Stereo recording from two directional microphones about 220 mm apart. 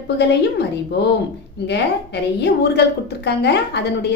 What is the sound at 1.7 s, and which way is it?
A woman's voice, 50° left (ahead or behind).